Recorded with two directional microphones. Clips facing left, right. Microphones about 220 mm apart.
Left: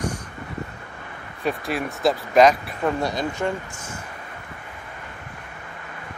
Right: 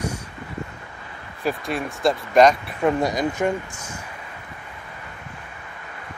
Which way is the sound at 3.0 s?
15° right (ahead or behind).